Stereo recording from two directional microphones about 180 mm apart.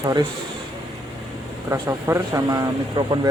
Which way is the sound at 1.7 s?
15° right (ahead or behind).